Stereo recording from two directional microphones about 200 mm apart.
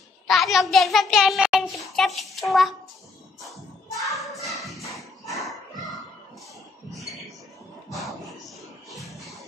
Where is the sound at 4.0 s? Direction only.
Centre (ahead or behind).